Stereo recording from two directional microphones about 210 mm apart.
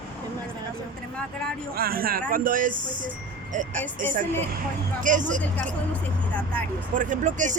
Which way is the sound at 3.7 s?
10° left (ahead or behind).